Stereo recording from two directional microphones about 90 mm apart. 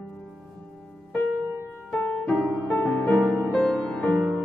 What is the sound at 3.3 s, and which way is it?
Music, 5° left (ahead or behind).